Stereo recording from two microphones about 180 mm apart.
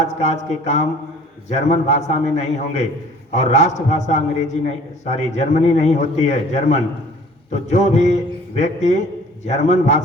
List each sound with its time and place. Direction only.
0.0 s a man's voice: 40° left (ahead or behind)